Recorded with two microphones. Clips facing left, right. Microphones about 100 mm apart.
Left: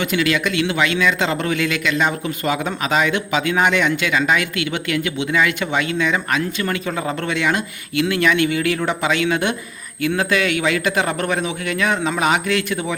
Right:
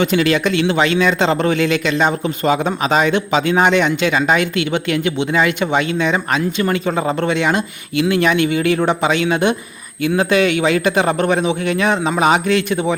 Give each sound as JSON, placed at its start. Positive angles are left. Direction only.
{"t": 0.0, "sound": "a man's voice", "side_deg": -30}